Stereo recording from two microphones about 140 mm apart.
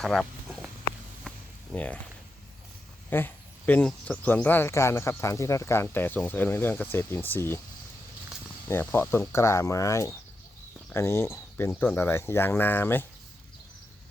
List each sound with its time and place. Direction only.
0.0 s speech: 5° left (ahead or behind)
1.3 s a sound: 5° left (ahead or behind)
1.7 s speech: 10° left (ahead or behind)
3.1 s speech: 15° left (ahead or behind)
8.6 s speech: 15° left (ahead or behind)